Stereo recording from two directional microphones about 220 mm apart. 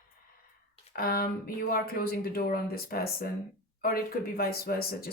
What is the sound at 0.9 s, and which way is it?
Speech, 45° left (ahead or behind).